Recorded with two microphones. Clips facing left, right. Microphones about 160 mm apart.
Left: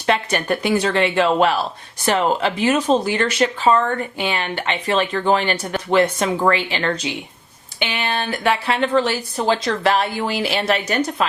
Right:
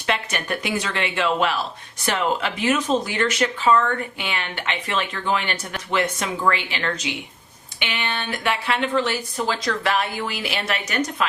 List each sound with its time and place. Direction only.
0.0 s speech: 35° left (ahead or behind)
6.5 s speech: 30° left (ahead or behind)